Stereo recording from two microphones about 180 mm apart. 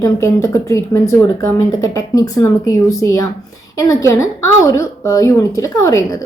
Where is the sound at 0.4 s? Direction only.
15° left (ahead or behind).